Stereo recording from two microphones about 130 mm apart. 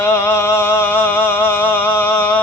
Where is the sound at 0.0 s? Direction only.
20° left (ahead or behind).